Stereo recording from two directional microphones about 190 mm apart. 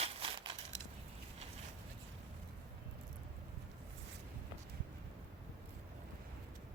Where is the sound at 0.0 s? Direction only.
30° right (ahead or behind).